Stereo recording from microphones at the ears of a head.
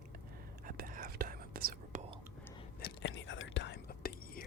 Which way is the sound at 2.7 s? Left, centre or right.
Left.